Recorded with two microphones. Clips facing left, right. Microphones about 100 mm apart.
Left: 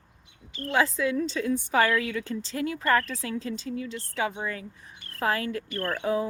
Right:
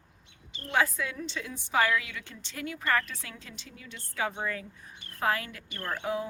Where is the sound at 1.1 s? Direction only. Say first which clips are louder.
Left 11 dB; 40° left (ahead or behind).